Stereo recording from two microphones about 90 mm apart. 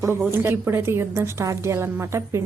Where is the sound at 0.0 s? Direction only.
25° right (ahead or behind).